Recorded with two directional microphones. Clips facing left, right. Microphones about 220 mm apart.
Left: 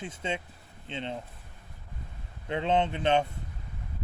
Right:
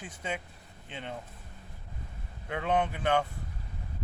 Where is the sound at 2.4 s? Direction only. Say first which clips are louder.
Left 2 dB; 25° left (ahead or behind).